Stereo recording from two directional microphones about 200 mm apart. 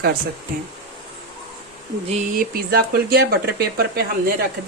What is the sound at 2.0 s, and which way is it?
Speech, 35° right (ahead or behind).